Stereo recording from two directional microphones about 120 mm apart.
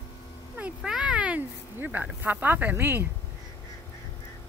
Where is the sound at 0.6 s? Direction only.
5° right (ahead or behind).